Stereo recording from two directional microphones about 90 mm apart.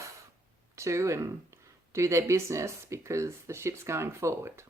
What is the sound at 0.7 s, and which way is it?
Speech, 35° right (ahead or behind).